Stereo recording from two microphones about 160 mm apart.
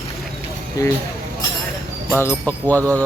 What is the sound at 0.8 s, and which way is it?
Speech, 20° left (ahead or behind).